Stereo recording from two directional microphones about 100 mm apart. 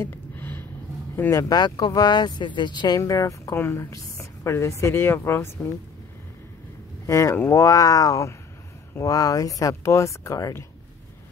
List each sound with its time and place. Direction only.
0.0 s a sound: 20° left (ahead or behind)
1.1 s speech: 25° left (ahead or behind)
1.4 s speech: 45° left (ahead or behind)
3.0 s a woman's voice: 35° left (ahead or behind)
7.1 s speech: 30° left (ahead or behind)